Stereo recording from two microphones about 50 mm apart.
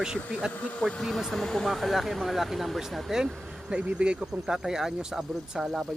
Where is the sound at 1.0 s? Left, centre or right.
Centre.